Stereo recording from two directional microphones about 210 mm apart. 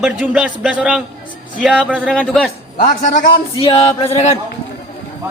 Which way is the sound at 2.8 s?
40° left (ahead or behind).